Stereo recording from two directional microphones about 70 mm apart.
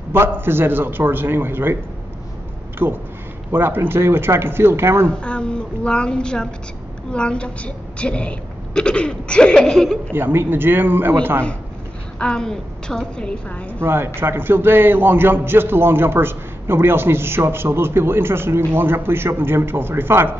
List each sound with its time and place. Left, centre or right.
0.1 s a man's voice: right
2.8 s a man's voice: right
5.2 s a woman's voice: centre
9.7 s speech: centre
10.1 s a man's voice: right
12.2 s a woman's voice: centre
13.7 s a man's voice: right